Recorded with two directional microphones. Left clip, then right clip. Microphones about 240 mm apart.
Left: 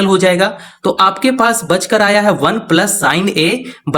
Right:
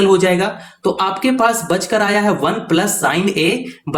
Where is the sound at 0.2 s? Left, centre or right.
Left.